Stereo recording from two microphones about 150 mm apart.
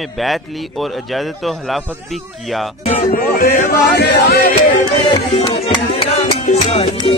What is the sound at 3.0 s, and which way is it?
Speech, 70° left (ahead or behind).